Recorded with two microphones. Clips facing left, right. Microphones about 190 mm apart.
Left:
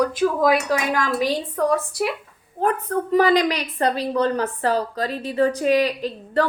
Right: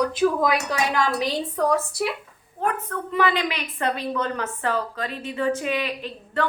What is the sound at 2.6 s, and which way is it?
A woman's voice, 35° left (ahead or behind).